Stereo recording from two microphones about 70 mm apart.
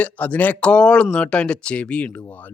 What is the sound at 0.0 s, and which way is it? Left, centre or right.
Speech, left.